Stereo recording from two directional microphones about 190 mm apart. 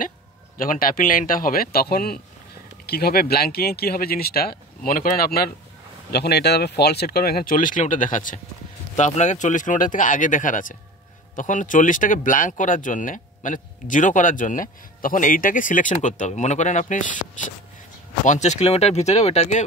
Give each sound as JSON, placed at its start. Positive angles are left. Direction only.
{"t": 0.6, "sound": "speech", "side_deg": 45}